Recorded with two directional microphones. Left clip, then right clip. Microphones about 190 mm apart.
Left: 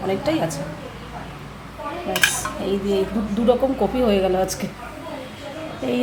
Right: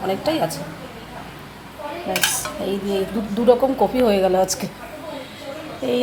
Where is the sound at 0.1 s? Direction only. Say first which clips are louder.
Right 1 dB; 10° right (ahead or behind).